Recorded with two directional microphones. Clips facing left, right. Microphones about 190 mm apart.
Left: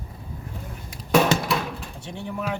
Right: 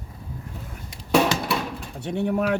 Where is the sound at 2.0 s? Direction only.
60° right (ahead or behind).